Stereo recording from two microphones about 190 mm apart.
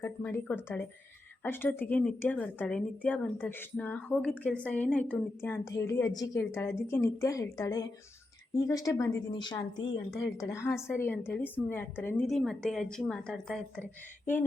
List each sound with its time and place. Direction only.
0.0 s a woman's voice: 15° left (ahead or behind)
12.3 s speech: centre (ahead or behind)